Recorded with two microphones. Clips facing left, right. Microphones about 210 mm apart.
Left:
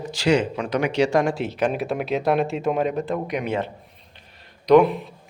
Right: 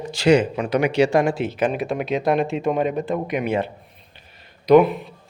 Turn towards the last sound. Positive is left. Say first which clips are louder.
# right 1 dB
turn(degrees=0)  # may be behind; listen again after turning